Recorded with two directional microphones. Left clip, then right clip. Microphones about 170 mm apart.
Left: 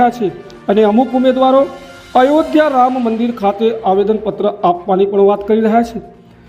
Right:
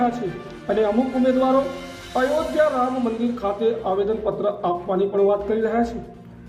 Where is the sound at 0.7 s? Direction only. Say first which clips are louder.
Left 9 dB; 50° left (ahead or behind).